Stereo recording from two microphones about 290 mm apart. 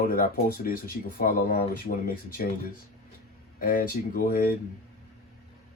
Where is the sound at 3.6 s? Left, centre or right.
Left.